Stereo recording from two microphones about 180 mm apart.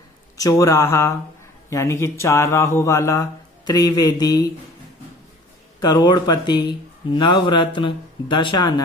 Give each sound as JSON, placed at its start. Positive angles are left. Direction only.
{"t": 0.4, "sound": "speech", "side_deg": 15}
{"t": 5.8, "sound": "speech", "side_deg": 20}